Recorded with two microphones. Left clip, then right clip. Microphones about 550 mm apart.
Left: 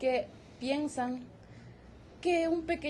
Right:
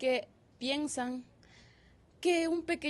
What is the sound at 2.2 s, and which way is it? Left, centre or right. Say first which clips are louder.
Speech: left 1 dB; right.